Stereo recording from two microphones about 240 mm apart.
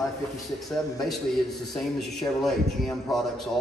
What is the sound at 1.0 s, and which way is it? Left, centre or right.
A man's voice, centre.